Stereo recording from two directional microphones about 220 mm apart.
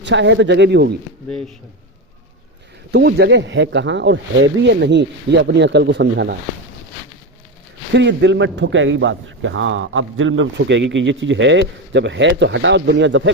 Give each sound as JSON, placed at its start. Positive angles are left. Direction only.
{"t": 0.0, "sound": "speech", "side_deg": -55}
{"t": 2.9, "sound": "speech", "side_deg": -50}
{"t": 7.9, "sound": "a man's voice", "side_deg": -55}